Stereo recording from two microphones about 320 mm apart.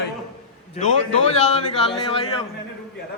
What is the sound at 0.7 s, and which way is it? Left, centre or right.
A man's voice, centre.